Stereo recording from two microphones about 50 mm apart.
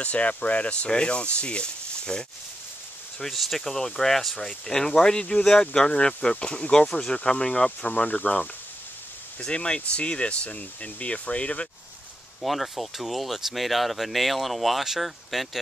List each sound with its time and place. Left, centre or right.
0.0 s speech: left
3.2 s speech: centre
5.7 s speech: left
9.4 s speech: centre
12.4 s speech: centre